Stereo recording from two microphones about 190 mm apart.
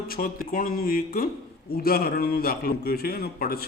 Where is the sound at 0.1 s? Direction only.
50° left (ahead or behind).